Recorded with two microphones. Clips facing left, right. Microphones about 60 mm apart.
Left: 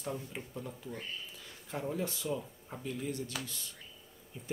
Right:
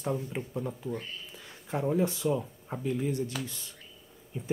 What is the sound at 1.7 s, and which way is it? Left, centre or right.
Speech, right.